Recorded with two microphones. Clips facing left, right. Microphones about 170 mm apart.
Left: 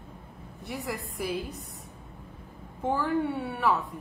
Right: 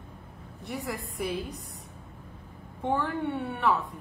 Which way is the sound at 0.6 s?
Centre (ahead or behind).